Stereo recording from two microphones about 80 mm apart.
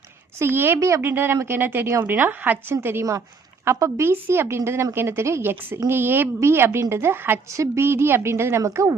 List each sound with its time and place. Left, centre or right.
0.3 s a woman's voice: right
1.1 s a woman's voice: right
3.7 s a woman's voice: right